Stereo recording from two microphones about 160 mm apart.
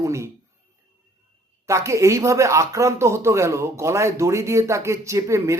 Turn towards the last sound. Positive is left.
turn(degrees=-20)  # may be behind; listen again after turning